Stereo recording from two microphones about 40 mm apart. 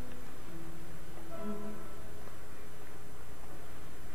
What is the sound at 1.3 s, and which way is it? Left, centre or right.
Music, right.